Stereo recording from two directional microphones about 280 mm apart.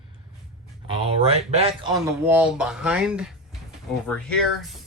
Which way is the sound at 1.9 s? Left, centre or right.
Centre.